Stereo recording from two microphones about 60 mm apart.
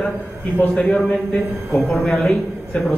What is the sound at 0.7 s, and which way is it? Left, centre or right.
A woman's voice, centre.